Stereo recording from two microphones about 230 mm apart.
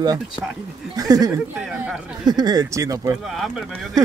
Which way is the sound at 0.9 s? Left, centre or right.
Centre.